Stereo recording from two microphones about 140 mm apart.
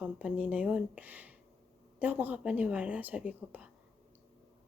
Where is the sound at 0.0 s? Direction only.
10° right (ahead or behind).